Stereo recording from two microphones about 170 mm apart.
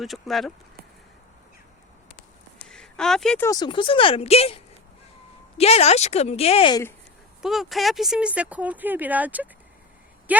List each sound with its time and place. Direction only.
0.0 s speech: centre (ahead or behind)
2.6 s a sound: 5° left (ahead or behind)
3.4 s a woman's voice: 25° left (ahead or behind)
7.4 s speech: centre (ahead or behind)